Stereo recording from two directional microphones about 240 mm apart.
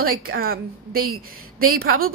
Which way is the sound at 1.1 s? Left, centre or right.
Right.